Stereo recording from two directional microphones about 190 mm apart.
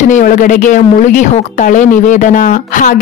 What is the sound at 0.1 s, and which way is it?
Speech, 45° left (ahead or behind).